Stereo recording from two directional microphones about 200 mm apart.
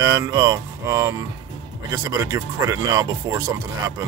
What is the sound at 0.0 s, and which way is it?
Speech, 15° right (ahead or behind).